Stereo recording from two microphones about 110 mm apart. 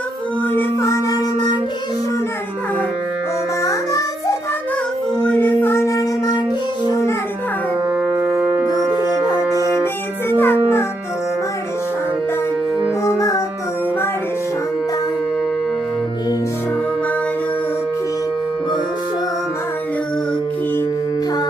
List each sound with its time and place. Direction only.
0.5 s child singing: 25° left (ahead or behind)
3.6 s music: 30° left (ahead or behind)
5.2 s music: 15° left (ahead or behind); by 6.3 s 30° left (ahead or behind)
8.3 s music: 15° right (ahead or behind)
10.2 s music: 20° left (ahead or behind)
13.1 s music: 30° left (ahead or behind)